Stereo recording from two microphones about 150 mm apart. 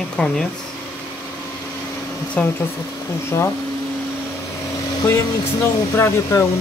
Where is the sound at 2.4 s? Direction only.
10° left (ahead or behind).